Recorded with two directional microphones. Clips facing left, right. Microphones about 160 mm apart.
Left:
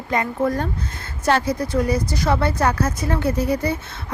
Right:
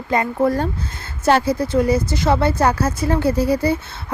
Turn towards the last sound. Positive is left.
turn(degrees=-30)  # may be behind; listen again after turning